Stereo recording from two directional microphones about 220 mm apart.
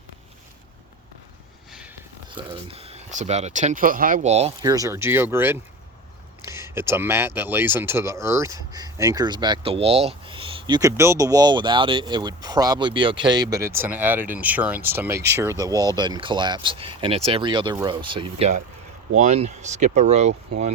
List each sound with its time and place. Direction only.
2.3 s speech: 25° right (ahead or behind)
4.6 s speech: 15° right (ahead or behind); by 20.7 s 30° right (ahead or behind)